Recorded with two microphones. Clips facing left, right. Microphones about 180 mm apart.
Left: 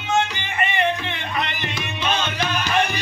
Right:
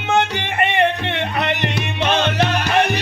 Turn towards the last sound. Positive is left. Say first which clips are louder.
# right 4 dB
turn(degrees=-65)  # may be behind; listen again after turning